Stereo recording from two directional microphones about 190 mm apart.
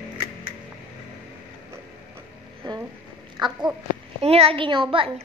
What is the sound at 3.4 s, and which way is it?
A woman's voice, 25° right (ahead or behind).